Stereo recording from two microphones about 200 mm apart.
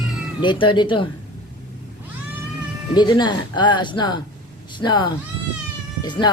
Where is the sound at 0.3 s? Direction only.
25° left (ahead or behind).